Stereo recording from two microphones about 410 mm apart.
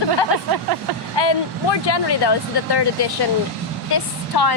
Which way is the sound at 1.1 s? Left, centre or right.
Left.